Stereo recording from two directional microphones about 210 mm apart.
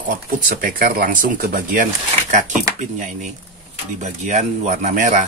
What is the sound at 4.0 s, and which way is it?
Speech, 35° right (ahead or behind).